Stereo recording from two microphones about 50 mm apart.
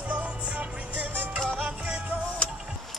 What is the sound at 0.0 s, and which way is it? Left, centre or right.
Music, right.